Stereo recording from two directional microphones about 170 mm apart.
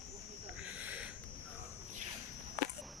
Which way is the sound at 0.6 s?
10° right (ahead or behind).